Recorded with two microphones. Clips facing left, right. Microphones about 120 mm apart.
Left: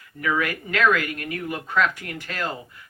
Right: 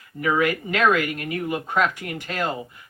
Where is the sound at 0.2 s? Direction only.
25° right (ahead or behind).